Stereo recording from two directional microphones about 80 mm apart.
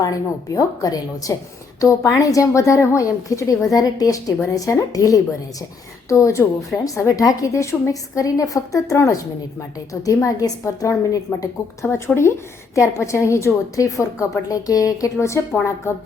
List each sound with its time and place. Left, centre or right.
0.0 s a woman's voice: left
11.9 s a woman's voice: left